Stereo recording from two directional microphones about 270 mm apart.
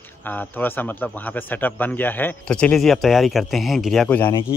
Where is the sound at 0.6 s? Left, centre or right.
Centre.